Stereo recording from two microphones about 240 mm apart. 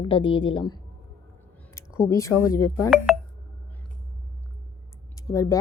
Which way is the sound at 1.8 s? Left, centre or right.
Centre.